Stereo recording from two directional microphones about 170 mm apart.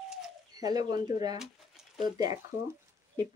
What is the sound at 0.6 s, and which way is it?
Speech, 20° right (ahead or behind).